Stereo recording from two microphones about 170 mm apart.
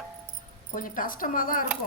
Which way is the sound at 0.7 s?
55° left (ahead or behind).